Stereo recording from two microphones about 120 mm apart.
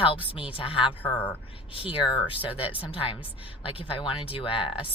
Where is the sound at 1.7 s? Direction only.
50° left (ahead or behind).